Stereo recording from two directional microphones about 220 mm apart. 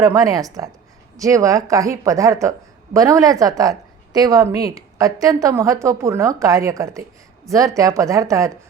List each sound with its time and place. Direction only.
0.0 s speech: 15° right (ahead or behind)